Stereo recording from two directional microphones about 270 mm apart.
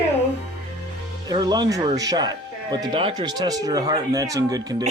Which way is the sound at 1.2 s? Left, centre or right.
Centre.